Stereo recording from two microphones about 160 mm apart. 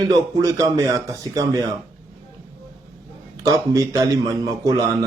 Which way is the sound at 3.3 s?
20° right (ahead or behind).